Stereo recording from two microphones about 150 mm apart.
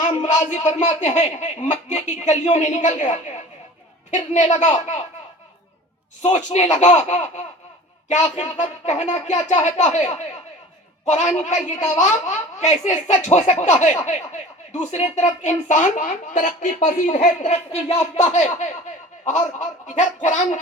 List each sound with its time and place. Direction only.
0.1 s a woman's voice: 50° left (ahead or behind)
6.2 s a woman's voice: 50° left (ahead or behind)
11.1 s a woman's voice: 50° left (ahead or behind)
17.2 s a woman's voice: 50° left (ahead or behind)
20.2 s gargling: 55° left (ahead or behind)